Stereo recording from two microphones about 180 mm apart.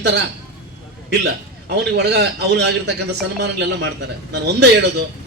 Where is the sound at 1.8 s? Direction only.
70° right (ahead or behind).